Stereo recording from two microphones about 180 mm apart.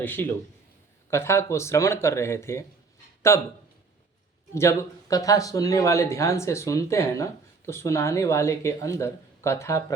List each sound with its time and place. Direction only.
0.0 s speech: 10° left (ahead or behind)
4.5 s speech: 15° left (ahead or behind)